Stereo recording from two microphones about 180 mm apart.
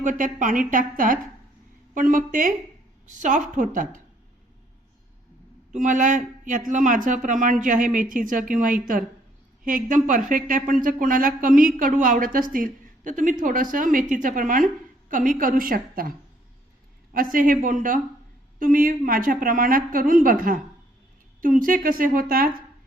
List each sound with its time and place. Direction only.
0.0 s speech: 45° right (ahead or behind)
5.7 s speech: 45° right (ahead or behind)